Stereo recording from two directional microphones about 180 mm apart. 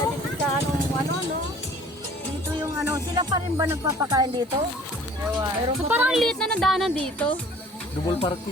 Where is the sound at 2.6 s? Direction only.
15° right (ahead or behind).